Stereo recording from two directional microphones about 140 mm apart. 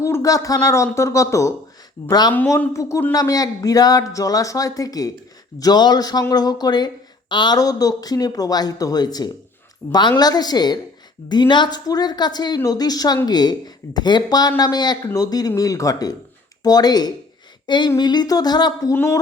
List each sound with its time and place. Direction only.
0.0 s speech: 20° left (ahead or behind)
2.3 s speech: 10° left (ahead or behind)
3.1 s speech: 25° left (ahead or behind)